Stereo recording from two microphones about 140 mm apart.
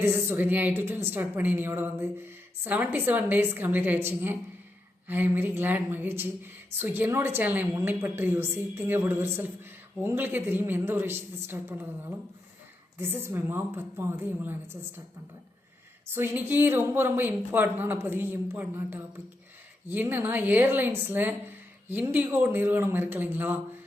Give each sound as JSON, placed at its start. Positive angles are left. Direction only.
{"t": 0.0, "sound": "a woman's voice", "side_deg": -15}
{"t": 13.0, "sound": "a woman's voice", "side_deg": -15}
{"t": 16.0, "sound": "a woman's voice", "side_deg": -15}